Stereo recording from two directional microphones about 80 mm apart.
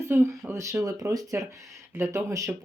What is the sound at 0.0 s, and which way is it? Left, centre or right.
Speech, right.